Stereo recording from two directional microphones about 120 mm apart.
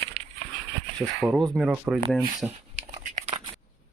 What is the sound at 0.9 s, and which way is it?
Speech, centre (ahead or behind).